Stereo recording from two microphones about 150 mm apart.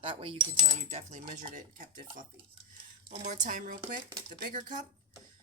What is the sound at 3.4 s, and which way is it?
Speech, 65° right (ahead or behind).